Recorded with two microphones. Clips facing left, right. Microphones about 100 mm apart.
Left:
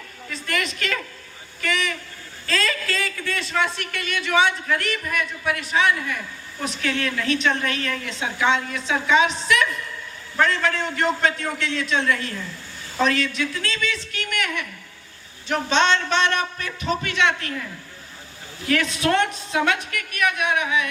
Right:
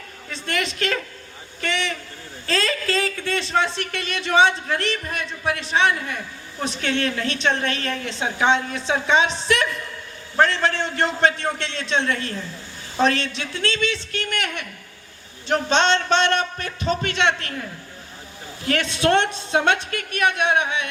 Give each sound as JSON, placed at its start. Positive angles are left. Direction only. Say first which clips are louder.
{"t": 0.3, "sound": "a man's voice", "louder": "right 1 dB", "side_deg": -30}
{"t": 18.7, "sound": "a man's voice", "louder": "right 2 dB", "side_deg": -30}